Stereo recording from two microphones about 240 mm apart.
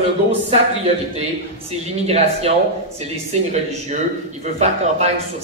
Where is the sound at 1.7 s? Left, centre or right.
Right.